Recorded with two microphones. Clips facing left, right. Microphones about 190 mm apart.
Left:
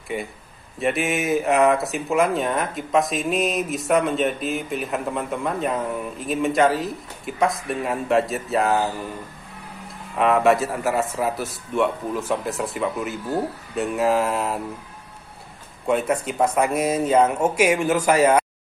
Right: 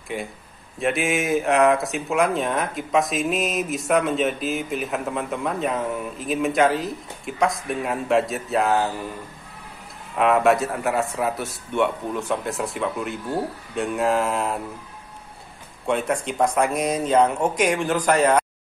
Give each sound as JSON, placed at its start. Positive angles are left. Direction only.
{"t": 0.1, "sound": "speech", "side_deg": 0}
{"t": 10.1, "sound": "speech", "side_deg": 0}
{"t": 15.9, "sound": "speech", "side_deg": 5}